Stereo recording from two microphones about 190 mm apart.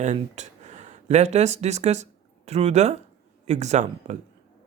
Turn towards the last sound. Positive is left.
turn(degrees=-35)  # may be behind; listen again after turning